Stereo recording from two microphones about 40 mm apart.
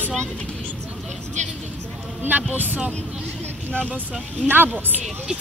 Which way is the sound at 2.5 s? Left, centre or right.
Right.